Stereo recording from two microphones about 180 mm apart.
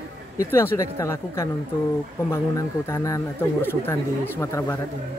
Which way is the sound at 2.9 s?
15° left (ahead or behind).